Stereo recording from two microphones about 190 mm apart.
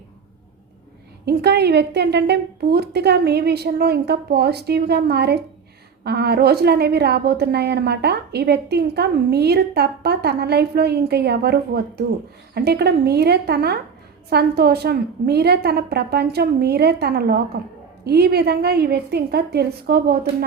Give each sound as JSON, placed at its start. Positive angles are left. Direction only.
{"t": 1.2, "sound": "a woman's voice", "side_deg": -60}